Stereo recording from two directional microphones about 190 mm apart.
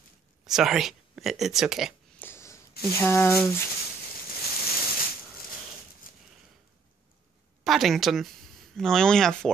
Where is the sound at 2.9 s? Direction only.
10° left (ahead or behind).